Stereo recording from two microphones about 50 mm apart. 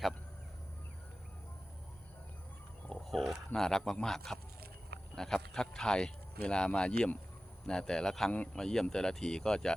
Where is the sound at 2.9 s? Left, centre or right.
Centre.